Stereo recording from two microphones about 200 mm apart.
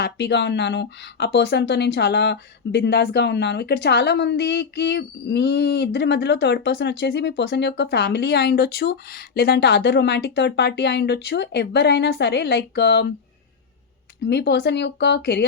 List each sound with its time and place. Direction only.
0.0 s speech: 55° left (ahead or behind)
14.3 s speech: 55° left (ahead or behind)